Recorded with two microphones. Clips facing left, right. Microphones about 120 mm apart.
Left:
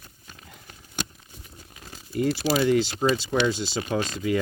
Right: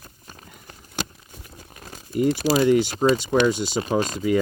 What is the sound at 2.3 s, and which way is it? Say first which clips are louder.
Speech: right 3 dB; 50° right (ahead or behind).